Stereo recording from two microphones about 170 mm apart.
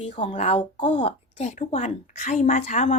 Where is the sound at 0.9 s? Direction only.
40° left (ahead or behind).